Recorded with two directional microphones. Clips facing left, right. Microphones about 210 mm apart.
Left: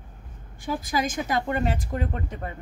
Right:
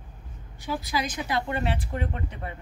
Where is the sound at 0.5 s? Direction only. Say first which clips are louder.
Left 2 dB; 50° left (ahead or behind).